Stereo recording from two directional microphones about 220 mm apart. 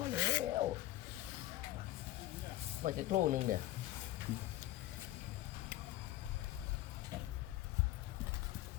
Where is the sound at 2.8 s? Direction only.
35° right (ahead or behind).